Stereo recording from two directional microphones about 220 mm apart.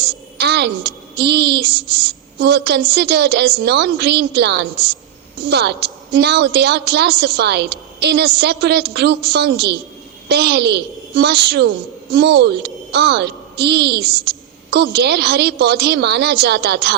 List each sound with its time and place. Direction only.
0.0 s a woman's voice: 50° right (ahead or behind)